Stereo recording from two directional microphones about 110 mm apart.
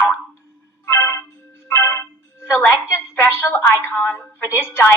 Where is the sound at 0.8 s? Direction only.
25° left (ahead or behind).